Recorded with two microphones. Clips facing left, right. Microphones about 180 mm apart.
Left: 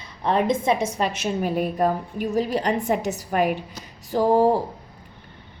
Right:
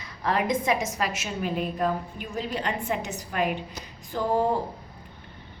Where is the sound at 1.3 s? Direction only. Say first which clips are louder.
Left 4 dB; 45° left (ahead or behind).